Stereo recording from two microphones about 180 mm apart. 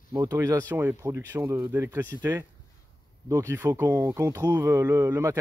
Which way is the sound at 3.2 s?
15° right (ahead or behind).